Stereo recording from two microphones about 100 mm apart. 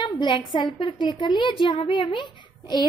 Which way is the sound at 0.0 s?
50° left (ahead or behind).